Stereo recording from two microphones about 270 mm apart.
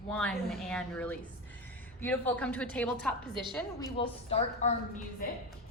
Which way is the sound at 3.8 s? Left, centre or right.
Left.